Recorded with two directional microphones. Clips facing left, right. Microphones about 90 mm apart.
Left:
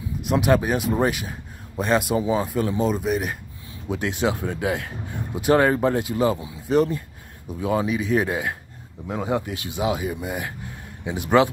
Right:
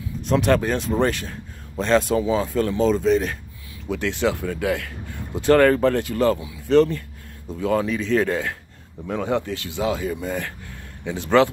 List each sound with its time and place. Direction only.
0.2 s speech: 10° left (ahead or behind)